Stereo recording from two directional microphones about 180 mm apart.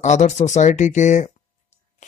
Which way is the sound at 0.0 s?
40° left (ahead or behind).